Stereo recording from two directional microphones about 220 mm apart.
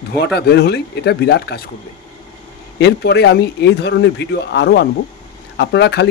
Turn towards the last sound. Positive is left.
turn(degrees=50)  # may be behind; listen again after turning